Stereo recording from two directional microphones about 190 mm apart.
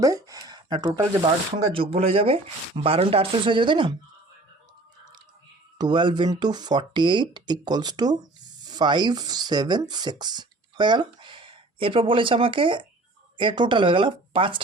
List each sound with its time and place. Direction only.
0.0 s speech: 15° right (ahead or behind)
5.7 s speech: 25° right (ahead or behind)